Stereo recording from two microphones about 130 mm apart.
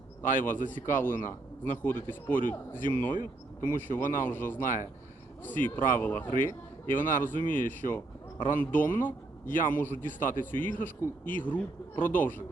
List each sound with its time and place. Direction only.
0.2 s speech: 15° left (ahead or behind)
10.2 s a man's voice: 90° left
10.4 s speech: 15° left (ahead or behind)